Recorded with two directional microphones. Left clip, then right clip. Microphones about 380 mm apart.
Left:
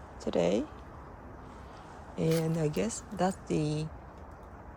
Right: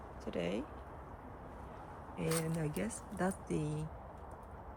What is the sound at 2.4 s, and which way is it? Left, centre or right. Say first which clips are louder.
Speech: left 8 dB; centre.